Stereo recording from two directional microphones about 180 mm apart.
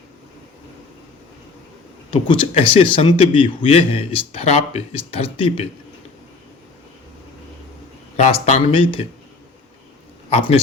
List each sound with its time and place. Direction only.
2.0 s a man's voice: 25° left (ahead or behind)
8.1 s a man's voice: 40° left (ahead or behind)
10.2 s a man's voice: 30° left (ahead or behind)